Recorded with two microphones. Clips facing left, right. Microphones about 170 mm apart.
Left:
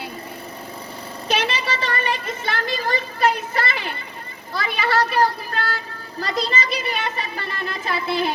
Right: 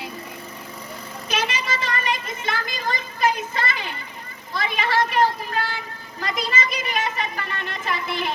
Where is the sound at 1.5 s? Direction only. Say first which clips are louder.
Left 2 dB; 35° left (ahead or behind).